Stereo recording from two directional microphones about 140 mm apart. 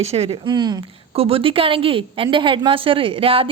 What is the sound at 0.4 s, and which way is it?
Speech, 30° right (ahead or behind).